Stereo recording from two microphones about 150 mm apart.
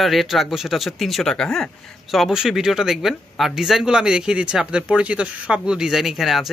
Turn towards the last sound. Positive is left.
turn(degrees=0)  # may be behind; listen again after turning